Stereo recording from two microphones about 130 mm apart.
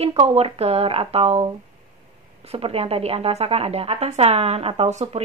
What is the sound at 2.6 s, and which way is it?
A woman's voice, 50° right (ahead or behind).